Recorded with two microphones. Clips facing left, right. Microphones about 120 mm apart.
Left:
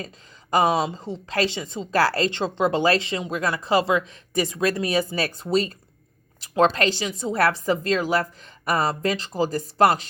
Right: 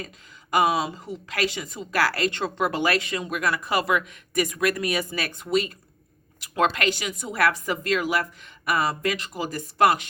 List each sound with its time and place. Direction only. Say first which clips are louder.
0.5 s a woman's voice: left 2 dB; 30° left (ahead or behind)